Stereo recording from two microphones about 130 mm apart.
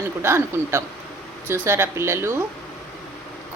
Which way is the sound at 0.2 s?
20° right (ahead or behind).